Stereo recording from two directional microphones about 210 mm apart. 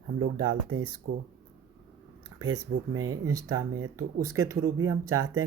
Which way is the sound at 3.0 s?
15° right (ahead or behind).